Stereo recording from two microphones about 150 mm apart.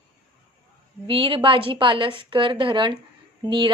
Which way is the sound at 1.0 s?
35° right (ahead or behind).